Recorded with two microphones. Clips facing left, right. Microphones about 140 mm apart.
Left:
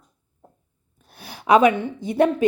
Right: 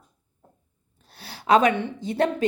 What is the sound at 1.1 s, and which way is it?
Speech, 15° left (ahead or behind).